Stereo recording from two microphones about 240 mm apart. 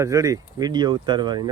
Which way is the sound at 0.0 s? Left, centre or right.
Centre.